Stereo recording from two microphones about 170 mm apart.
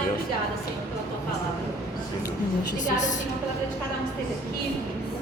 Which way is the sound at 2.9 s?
45° left (ahead or behind).